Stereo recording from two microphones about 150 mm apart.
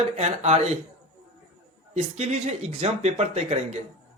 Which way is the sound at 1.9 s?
45° right (ahead or behind).